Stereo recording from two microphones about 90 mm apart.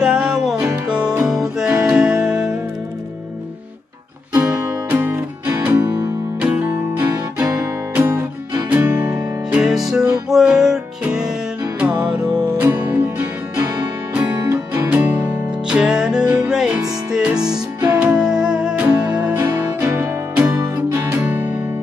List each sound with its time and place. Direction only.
0.0 s music: 5° right (ahead or behind)
4.9 s music: 25° right (ahead or behind)
6.4 s music: 20° right (ahead or behind)
7.9 s music: 25° right (ahead or behind)
9.7 s music: 5° right (ahead or behind)
12.5 s music: 25° right (ahead or behind)
14.4 s music: 35° right (ahead or behind)
14.9 s music: 15° right (ahead or behind)
19.3 s music: 30° right (ahead or behind)